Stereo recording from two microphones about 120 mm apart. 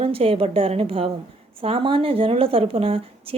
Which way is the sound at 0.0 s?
50° right (ahead or behind).